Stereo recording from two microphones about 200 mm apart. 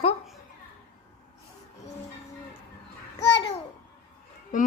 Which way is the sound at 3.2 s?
60° left (ahead or behind).